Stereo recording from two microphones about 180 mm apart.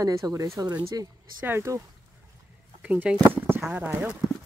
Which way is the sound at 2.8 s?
10° right (ahead or behind).